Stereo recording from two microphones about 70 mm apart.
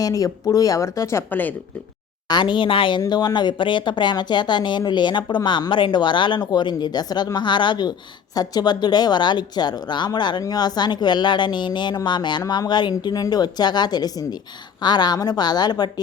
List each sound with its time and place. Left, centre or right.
0.0 s speech: left
1.3 s speech: left
2.2 s a woman's voice: left
7.3 s a woman's voice: left
8.4 s a woman's voice: left
10.5 s a woman's voice: left